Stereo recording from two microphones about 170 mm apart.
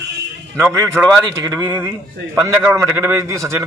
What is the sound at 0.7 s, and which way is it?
A man's voice, 20° right (ahead or behind).